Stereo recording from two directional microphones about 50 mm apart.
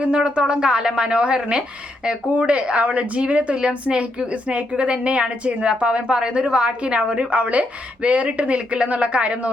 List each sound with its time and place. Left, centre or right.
0.0 s a woman's voice: centre